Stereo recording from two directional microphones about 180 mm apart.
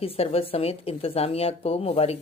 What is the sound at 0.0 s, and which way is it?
Speech, 35° left (ahead or behind).